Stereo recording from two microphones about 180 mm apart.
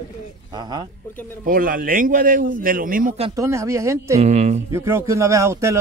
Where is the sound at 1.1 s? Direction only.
10° left (ahead or behind).